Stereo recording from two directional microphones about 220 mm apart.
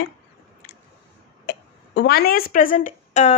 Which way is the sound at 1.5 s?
50° left (ahead or behind).